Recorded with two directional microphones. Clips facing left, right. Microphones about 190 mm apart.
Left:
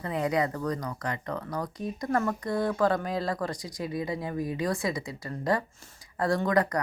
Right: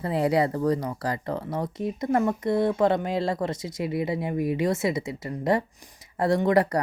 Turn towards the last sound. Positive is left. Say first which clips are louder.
# right 4 dB
turn(degrees=-25)  # may be behind; listen again after turning